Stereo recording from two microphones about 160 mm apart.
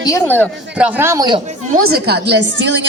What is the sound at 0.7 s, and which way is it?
Speech, 10° right (ahead or behind).